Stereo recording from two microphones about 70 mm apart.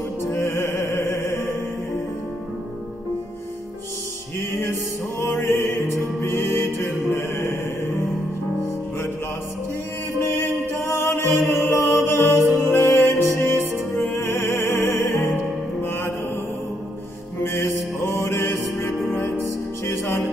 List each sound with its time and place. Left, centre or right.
0.2 s music: left
4.4 s music: left
10.2 s music: left
17.4 s music: left